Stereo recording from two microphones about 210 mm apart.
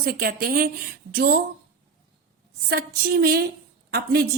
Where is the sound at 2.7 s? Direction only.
45° right (ahead or behind).